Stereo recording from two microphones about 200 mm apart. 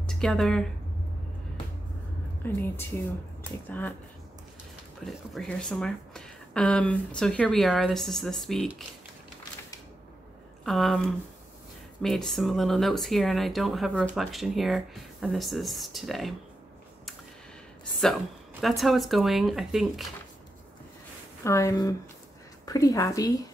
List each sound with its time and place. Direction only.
0.0 s speech: 5° left (ahead or behind)
2.4 s a woman's voice: 10° left (ahead or behind)
5.0 s speech: centre (ahead or behind)
10.6 s speech: centre (ahead or behind)
18.6 s speech: centre (ahead or behind)
21.5 s a woman's voice: 15° left (ahead or behind)